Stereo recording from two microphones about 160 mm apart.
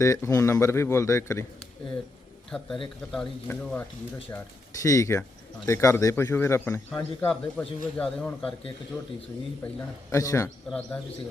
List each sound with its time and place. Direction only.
0.0 s a man's voice: 20° left (ahead or behind)
2.5 s a man's voice: 10° left (ahead or behind)
9.6 s a man's voice: 10° left (ahead or behind)
10.7 s a man's voice: 5° left (ahead or behind)